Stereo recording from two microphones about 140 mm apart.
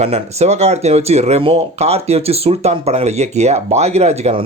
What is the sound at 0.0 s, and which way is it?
Speech, 50° right (ahead or behind).